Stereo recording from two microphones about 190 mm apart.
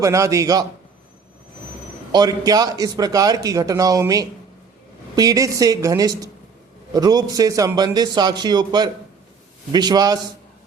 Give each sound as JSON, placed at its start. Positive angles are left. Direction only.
{"t": 0.0, "sound": "a man's voice", "side_deg": -15}
{"t": 2.1, "sound": "speech", "side_deg": -20}